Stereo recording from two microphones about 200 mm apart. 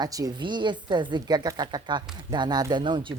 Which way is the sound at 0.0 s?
20° right (ahead or behind).